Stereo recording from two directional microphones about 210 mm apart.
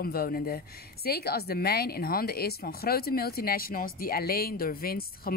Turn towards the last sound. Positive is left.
turn(degrees=45)  # may be behind; listen again after turning